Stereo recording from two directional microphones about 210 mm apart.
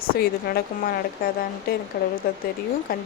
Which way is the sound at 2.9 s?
45° left (ahead or behind).